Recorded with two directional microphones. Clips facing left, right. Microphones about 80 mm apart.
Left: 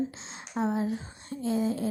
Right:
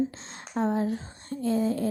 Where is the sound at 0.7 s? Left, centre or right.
Right.